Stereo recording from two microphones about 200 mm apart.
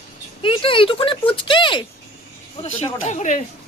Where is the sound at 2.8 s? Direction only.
35° left (ahead or behind).